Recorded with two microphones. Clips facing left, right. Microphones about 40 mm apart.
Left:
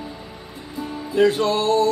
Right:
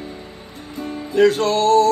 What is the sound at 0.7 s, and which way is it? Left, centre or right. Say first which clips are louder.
Music: right 2 dB; right.